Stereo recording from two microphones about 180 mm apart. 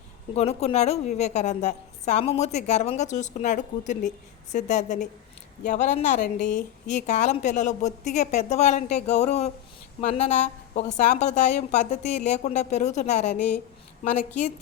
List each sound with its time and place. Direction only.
0.3 s a woman's voice: 35° left (ahead or behind)